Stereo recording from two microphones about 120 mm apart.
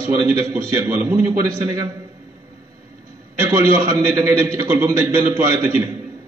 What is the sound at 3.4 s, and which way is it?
A man's voice, 30° right (ahead or behind).